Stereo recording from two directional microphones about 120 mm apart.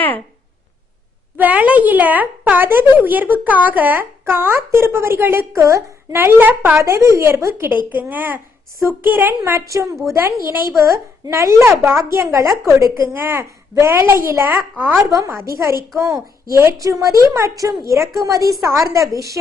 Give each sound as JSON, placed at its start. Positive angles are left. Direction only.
{"t": 1.4, "sound": "a child's voice", "side_deg": -10}
{"t": 15.0, "sound": "a child's voice", "side_deg": -30}